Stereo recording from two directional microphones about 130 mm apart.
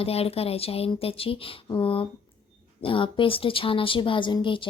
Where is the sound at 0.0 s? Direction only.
50° left (ahead or behind).